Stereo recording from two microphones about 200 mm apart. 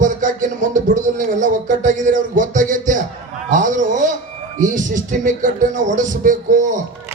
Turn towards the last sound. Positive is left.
turn(degrees=-40)  # may be behind; listen again after turning